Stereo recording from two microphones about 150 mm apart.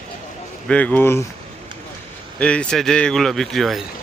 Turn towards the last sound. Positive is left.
turn(degrees=0)  # may be behind; listen again after turning